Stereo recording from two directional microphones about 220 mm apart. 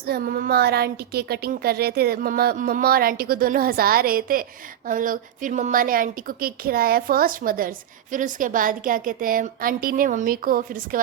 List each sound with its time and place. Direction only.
0.0 s a woman's voice: 45° right (ahead or behind)